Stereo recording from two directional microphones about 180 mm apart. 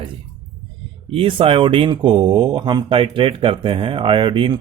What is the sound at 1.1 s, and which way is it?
Speech, 30° right (ahead or behind).